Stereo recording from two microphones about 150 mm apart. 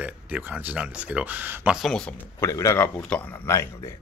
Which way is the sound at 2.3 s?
20° left (ahead or behind).